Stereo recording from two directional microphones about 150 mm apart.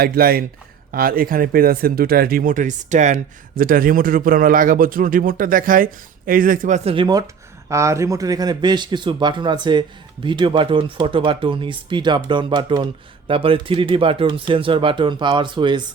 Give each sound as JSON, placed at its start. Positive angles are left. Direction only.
{"t": 0.0, "sound": "a man's voice", "side_deg": -80}
{"t": 3.6, "sound": "a man's voice", "side_deg": -70}
{"t": 6.9, "sound": "a man's voice", "side_deg": -30}
{"t": 7.7, "sound": "a man's voice", "side_deg": -20}